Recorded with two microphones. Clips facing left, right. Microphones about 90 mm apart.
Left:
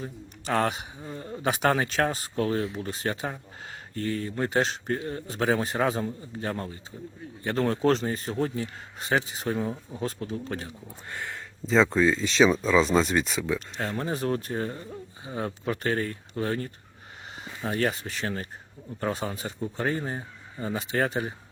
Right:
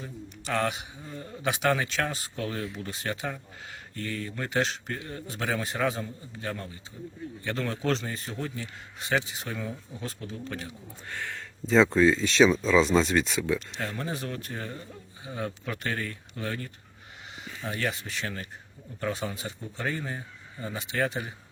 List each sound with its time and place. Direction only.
0.0 s a man's voice: 35° left (ahead or behind)
11.1 s speech: 10° left (ahead or behind)
13.7 s speech: 35° left (ahead or behind)